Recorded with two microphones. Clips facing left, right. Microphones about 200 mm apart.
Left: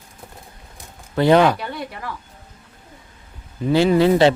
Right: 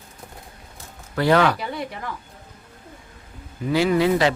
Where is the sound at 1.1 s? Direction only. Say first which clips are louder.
Left 4 dB; 20° left (ahead or behind).